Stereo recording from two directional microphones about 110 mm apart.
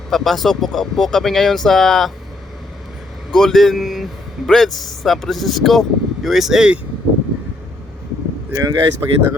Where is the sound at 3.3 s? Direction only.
5° left (ahead or behind).